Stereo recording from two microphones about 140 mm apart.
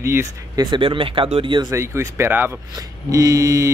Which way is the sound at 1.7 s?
20° right (ahead or behind).